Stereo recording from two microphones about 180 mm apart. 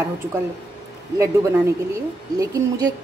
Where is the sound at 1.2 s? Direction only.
15° right (ahead or behind).